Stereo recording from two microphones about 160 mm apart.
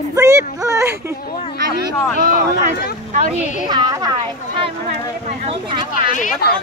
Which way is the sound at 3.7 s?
25° right (ahead or behind).